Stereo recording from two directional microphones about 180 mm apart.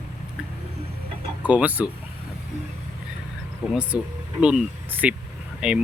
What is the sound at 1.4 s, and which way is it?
Speech, 10° right (ahead or behind).